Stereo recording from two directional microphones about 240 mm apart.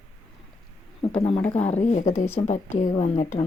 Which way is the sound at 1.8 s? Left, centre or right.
Left.